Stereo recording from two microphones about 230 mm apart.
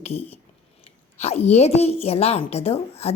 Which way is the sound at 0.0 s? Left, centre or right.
Left.